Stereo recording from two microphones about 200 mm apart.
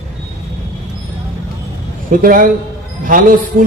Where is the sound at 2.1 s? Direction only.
45° right (ahead or behind).